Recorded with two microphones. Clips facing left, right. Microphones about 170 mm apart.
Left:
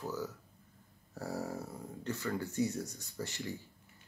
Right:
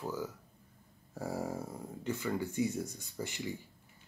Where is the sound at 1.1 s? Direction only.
10° right (ahead or behind).